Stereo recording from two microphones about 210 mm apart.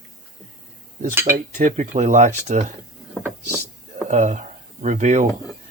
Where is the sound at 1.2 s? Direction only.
40° right (ahead or behind).